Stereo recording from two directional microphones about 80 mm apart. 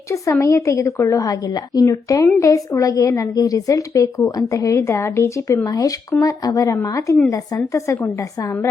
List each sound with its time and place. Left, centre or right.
0.1 s a woman's voice: left
1.9 s a woman's voice: left
5.6 s a woman's voice: left